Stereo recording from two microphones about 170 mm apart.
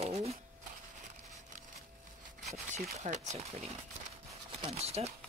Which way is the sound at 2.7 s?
45° right (ahead or behind).